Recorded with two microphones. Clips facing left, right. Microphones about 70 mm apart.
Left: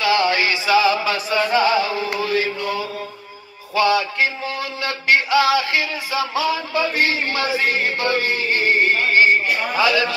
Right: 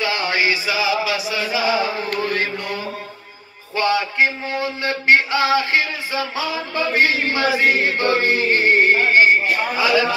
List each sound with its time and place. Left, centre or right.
0.0 s chant: right
3.7 s music: right